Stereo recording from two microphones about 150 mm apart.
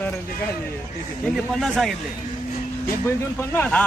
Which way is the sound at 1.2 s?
Centre (ahead or behind).